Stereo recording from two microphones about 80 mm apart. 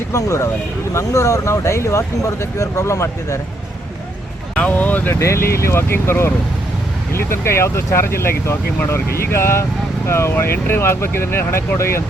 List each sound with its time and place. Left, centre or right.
0.1 s speech: left
4.5 s speech: centre
5.2 s speech: left